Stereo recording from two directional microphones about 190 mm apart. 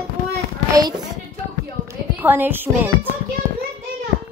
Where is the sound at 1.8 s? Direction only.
10° right (ahead or behind).